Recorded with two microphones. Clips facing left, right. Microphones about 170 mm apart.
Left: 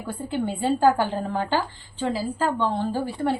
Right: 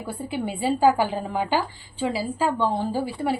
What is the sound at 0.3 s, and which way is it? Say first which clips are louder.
Speech: left 1 dB; 10° right (ahead or behind).